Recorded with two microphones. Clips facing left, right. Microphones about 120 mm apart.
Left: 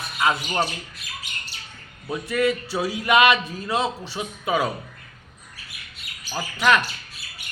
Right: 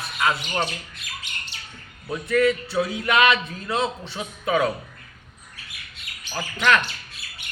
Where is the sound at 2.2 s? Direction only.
10° left (ahead or behind).